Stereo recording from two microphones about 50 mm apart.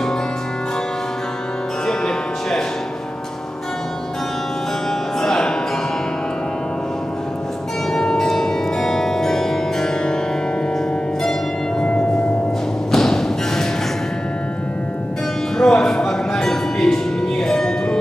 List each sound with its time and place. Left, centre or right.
1.9 s music: centre
5.2 s music: centre
7.9 s music: centre
11.8 s music: centre
12.9 s thump: centre
15.5 s music: centre